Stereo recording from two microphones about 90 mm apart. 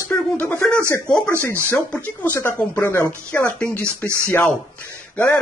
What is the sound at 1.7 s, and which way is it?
Speech, 25° left (ahead or behind).